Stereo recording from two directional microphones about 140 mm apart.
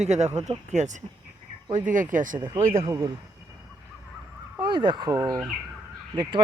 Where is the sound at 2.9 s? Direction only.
20° right (ahead or behind).